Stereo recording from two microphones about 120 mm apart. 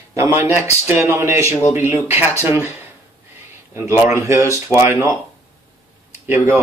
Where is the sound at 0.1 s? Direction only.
20° right (ahead or behind).